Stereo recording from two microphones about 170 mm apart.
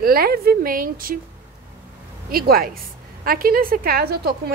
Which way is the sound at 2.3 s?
60° right (ahead or behind).